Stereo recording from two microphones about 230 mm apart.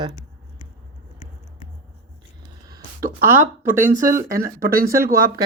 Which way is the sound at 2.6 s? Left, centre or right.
Centre.